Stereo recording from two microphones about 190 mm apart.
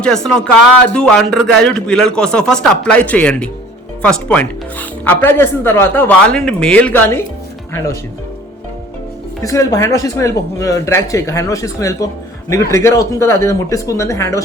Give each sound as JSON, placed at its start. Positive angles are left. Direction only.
{"t": 0.0, "sound": "speech", "side_deg": 5}
{"t": 9.4, "sound": "speech", "side_deg": 15}